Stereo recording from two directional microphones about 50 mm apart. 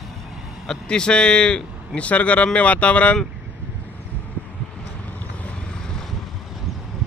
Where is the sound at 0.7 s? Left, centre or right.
Centre.